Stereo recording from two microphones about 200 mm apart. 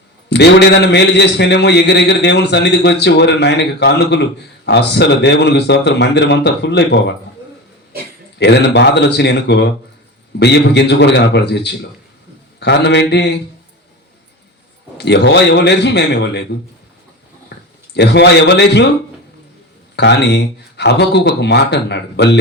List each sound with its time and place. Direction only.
0.3 s a man's voice: 55° left (ahead or behind)
8.4 s a man's voice: 55° left (ahead or behind)
14.9 s a man's voice: 60° left (ahead or behind)
17.9 s a man's voice: 55° left (ahead or behind)
20.0 s a man's voice: 60° left (ahead or behind)